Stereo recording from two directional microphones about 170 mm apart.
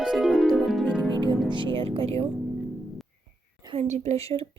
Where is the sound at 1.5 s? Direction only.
30° right (ahead or behind).